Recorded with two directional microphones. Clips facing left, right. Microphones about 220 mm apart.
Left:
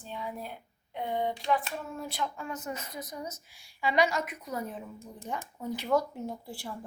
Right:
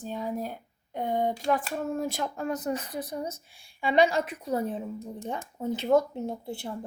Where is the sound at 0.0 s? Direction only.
40° right (ahead or behind).